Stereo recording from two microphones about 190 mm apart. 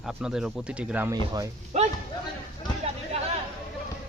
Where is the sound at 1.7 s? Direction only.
35° right (ahead or behind).